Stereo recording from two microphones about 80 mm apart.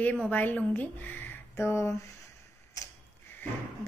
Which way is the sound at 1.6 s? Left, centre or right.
Left.